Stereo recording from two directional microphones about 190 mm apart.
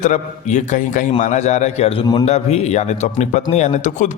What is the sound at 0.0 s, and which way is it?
A man's voice, 40° left (ahead or behind).